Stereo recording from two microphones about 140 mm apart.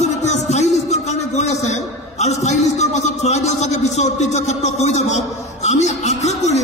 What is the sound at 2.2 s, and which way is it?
A man's voice, 55° left (ahead or behind).